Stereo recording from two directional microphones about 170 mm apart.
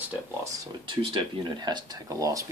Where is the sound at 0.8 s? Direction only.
30° right (ahead or behind).